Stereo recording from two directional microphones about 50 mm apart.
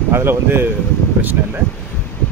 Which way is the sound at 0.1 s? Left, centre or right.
Right.